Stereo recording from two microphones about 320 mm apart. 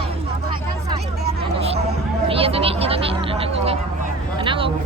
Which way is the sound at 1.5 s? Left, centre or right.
Centre.